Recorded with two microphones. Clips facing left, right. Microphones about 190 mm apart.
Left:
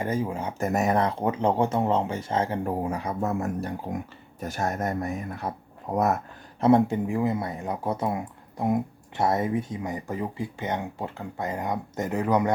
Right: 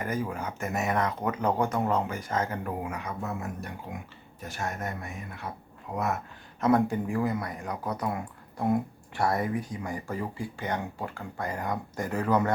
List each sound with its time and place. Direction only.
0.0 s speech: 25° left (ahead or behind)
0.7 s speech: 40° left (ahead or behind)
3.2 s speech: 45° left (ahead or behind)
6.6 s speech: 25° left (ahead or behind)